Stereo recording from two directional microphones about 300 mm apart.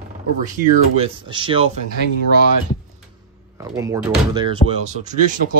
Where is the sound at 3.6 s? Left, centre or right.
Centre.